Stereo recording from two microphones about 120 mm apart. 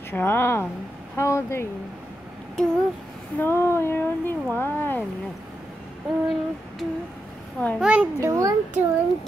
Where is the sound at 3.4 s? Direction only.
20° left (ahead or behind).